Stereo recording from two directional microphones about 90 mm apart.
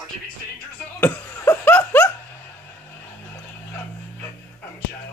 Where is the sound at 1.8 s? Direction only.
20° left (ahead or behind).